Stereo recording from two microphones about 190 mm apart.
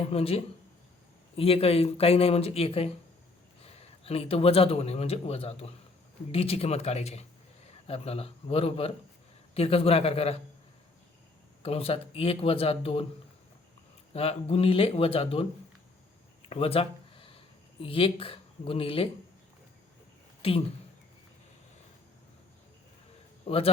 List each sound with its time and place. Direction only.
0.1 s a man's voice: 30° left (ahead or behind)
11.6 s a man's voice: 30° left (ahead or behind)
14.1 s a man's voice: 30° left (ahead or behind)
16.5 s a sound: 30° left (ahead or behind)
17.8 s a man's voice: 30° left (ahead or behind)
20.4 s speech: 30° left (ahead or behind)
23.5 s speech: 30° left (ahead or behind)